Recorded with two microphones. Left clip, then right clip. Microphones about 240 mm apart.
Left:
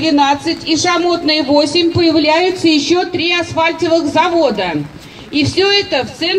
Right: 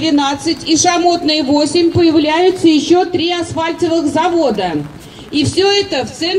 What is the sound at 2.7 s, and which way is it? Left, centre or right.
Speech, left.